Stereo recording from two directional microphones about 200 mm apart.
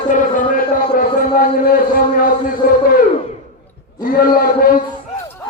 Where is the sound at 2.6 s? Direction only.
45° left (ahead or behind).